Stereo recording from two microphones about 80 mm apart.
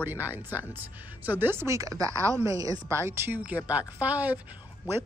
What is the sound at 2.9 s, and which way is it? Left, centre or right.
Speech, right.